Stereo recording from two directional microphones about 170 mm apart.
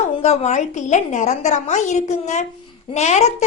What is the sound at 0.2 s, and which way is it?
A woman's voice, 40° left (ahead or behind).